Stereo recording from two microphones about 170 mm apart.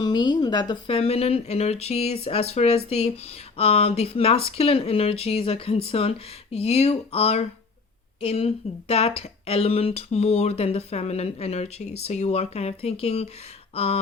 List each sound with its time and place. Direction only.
0.0 s speech: 25° left (ahead or behind)